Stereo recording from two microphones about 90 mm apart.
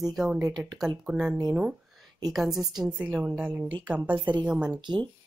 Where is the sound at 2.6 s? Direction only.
10° right (ahead or behind).